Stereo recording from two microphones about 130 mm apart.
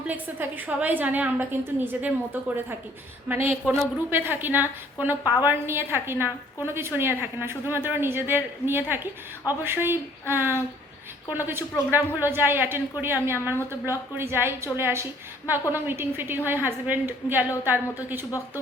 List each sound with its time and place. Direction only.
0.1 s a woman's voice: 15° right (ahead or behind)
3.6 s speech: 5° left (ahead or behind)
4.1 s a woman's voice: 15° right (ahead or behind)